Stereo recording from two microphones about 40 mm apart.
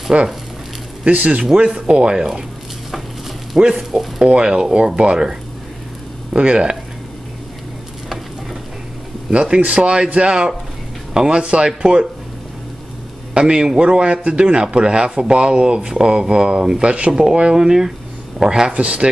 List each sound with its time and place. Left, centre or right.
0.1 s a man's voice: right
3.6 s a man's voice: centre
6.3 s a man's voice: right
9.3 s a man's voice: right
13.3 s a man's voice: right
16.8 s a man's voice: right
17.1 s speech: centre
18.7 s speech: right